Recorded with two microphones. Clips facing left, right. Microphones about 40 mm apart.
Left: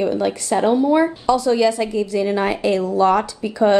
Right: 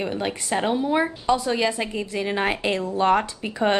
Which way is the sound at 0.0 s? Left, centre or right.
Right.